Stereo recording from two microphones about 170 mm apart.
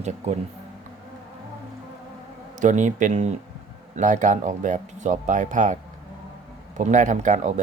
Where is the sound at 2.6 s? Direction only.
45° right (ahead or behind).